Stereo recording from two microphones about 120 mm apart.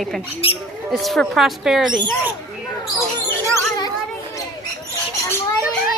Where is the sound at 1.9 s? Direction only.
40° right (ahead or behind).